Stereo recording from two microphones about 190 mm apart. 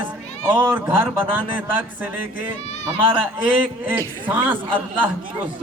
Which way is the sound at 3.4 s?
10° right (ahead or behind).